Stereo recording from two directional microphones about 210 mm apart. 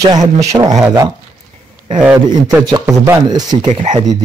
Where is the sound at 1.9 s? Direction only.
5° right (ahead or behind).